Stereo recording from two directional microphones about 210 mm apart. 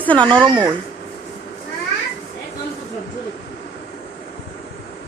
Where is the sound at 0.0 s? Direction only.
5° left (ahead or behind).